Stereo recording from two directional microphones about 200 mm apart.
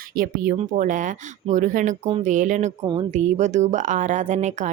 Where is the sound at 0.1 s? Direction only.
45° right (ahead or behind).